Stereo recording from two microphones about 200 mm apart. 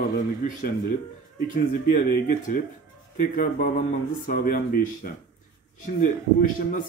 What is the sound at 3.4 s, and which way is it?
Speech, 45° left (ahead or behind).